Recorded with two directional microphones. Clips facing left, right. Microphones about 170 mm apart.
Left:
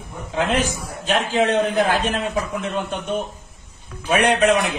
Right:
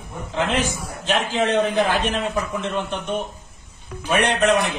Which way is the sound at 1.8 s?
5° left (ahead or behind).